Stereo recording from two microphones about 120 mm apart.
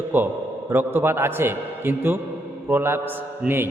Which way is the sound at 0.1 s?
15° right (ahead or behind).